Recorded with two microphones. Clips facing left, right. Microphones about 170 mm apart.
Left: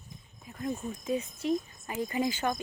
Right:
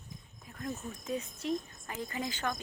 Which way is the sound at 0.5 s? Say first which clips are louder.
Left 5 dB; 5° left (ahead or behind).